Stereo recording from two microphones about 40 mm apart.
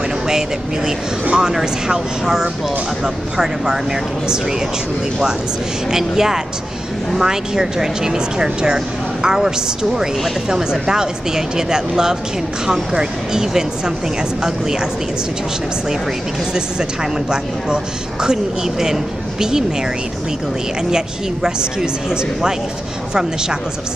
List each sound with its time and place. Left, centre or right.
0.3 s speech: centre
5.9 s speech: centre
10.5 s speech: centre
16.5 s speech: centre
20.9 s speech: centre